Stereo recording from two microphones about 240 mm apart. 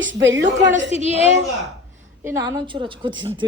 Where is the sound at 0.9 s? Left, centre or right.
Right.